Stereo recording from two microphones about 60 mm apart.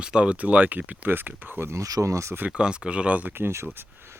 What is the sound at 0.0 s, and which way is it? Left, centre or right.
Speech, centre.